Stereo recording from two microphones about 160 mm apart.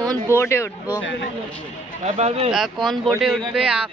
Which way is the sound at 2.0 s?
40° right (ahead or behind).